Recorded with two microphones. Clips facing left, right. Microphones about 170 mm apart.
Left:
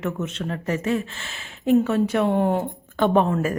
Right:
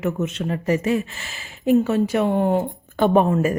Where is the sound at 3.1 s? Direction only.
15° right (ahead or behind).